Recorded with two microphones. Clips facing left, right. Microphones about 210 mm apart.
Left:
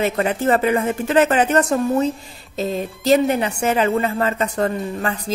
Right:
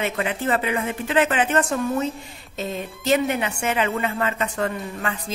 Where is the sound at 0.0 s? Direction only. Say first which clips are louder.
Left 6 dB; 40° left (ahead or behind).